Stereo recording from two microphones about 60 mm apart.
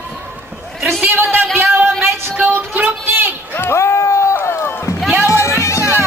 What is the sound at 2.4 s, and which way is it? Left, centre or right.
Speech, right.